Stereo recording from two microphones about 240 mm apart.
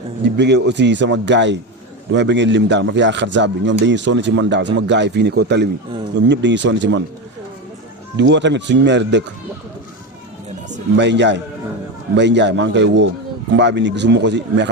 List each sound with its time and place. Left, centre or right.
0.3 s a man's voice: right
8.1 s a man's voice: right
10.9 s a man's voice: right